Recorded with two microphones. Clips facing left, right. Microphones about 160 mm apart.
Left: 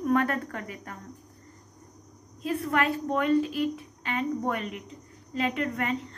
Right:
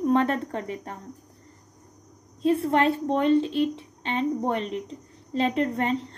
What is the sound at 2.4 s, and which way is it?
A woman's voice, 30° right (ahead or behind).